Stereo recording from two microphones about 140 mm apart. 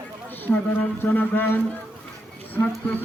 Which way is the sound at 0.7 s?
15° left (ahead or behind).